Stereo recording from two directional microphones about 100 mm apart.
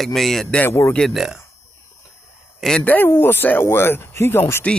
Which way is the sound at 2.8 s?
20° left (ahead or behind).